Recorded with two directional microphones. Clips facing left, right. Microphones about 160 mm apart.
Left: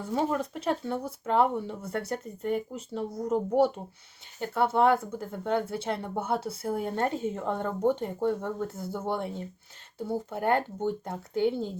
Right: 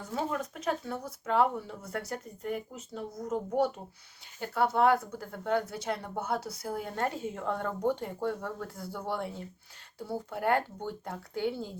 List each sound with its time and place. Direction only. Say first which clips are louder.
0.0 s speech: left 5 dB; 30° left (ahead or behind)
4.5 s speech: left 2 dB; 25° left (ahead or behind)